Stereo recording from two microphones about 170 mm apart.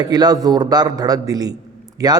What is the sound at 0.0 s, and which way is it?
A man's voice, 25° right (ahead or behind).